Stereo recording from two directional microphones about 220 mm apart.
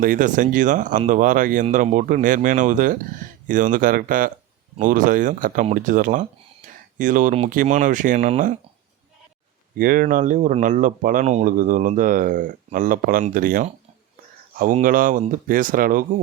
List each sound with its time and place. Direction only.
0.0 s speech: 40° right (ahead or behind)
9.7 s speech: 40° right (ahead or behind)